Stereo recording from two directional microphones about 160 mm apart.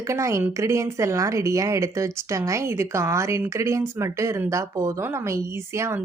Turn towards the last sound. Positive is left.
turn(degrees=-15)  # may be behind; listen again after turning